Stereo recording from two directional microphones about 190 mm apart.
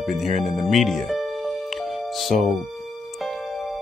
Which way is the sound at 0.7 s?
Centre (ahead or behind).